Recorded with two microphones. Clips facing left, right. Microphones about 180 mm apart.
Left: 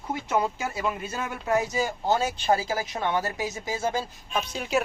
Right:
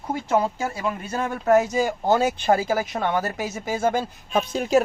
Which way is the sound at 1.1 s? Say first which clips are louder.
Right 10 dB; 50° right (ahead or behind).